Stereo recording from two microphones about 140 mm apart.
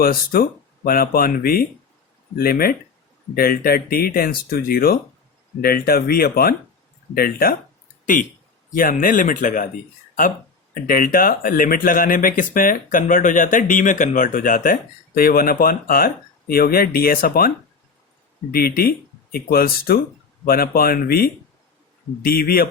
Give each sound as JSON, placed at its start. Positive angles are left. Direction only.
{"t": 0.0, "sound": "speech", "side_deg": 90}
{"t": 8.7, "sound": "speech", "side_deg": 80}
{"t": 10.8, "sound": "speech", "side_deg": 90}
{"t": 18.5, "sound": "speech", "side_deg": 90}